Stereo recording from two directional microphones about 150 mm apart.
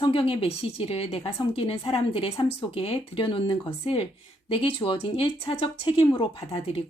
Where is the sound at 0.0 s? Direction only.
35° left (ahead or behind).